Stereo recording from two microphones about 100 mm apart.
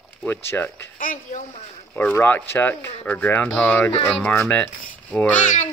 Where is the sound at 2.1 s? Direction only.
20° left (ahead or behind).